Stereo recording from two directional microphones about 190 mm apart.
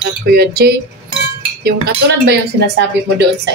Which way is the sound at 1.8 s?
60° right (ahead or behind).